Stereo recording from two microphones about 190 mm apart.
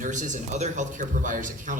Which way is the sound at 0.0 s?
40° right (ahead or behind).